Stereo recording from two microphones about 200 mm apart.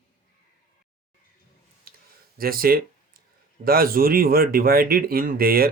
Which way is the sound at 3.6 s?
45° right (ahead or behind).